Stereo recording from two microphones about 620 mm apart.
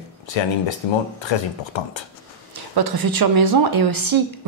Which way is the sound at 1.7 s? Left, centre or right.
Left.